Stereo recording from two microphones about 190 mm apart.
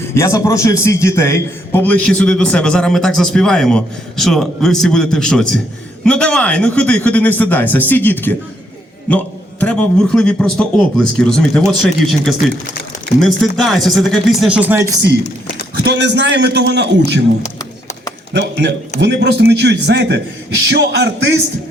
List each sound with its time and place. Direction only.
0.1 s a man's voice: 15° left (ahead or behind); by 14.9 s 10° right (ahead or behind)
15.8 s a man's voice: 60° right (ahead or behind)
17.4 s a sound: 20° left (ahead or behind)
18.3 s a man's voice: 65° right (ahead or behind)